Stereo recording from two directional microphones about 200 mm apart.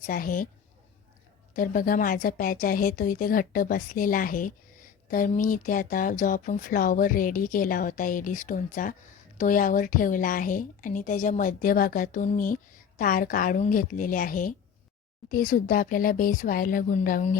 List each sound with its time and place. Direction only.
0.0 s speech: 45° left (ahead or behind)
1.5 s speech: 45° left (ahead or behind)